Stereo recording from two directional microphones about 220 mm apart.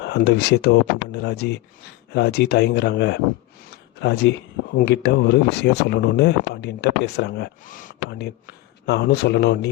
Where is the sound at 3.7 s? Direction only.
50° left (ahead or behind).